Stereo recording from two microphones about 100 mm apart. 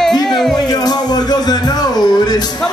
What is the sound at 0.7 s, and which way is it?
Music, 40° left (ahead or behind).